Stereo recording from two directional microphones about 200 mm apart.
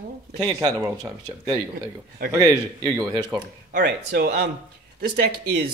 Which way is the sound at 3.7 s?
55° right (ahead or behind).